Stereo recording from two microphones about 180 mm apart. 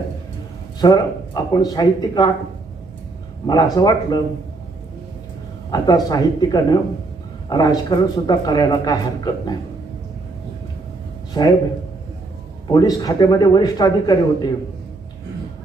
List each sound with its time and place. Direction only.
0.8 s a man's voice: 20° left (ahead or behind)
3.4 s a man's voice: 20° left (ahead or behind)
5.7 s a man's voice: 20° left (ahead or behind)
11.3 s a man's voice: 25° left (ahead or behind)
12.6 s a man's voice: 20° left (ahead or behind)